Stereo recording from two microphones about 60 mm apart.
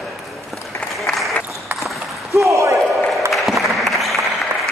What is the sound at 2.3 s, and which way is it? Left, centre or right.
Basketball bounce, right.